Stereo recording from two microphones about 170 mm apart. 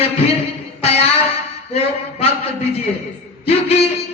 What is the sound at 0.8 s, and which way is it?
Music, 35° left (ahead or behind).